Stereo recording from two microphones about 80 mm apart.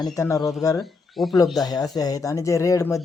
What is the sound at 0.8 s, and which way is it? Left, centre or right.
Speech, centre.